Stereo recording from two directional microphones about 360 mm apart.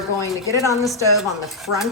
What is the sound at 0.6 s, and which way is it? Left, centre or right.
A woman's voice, centre.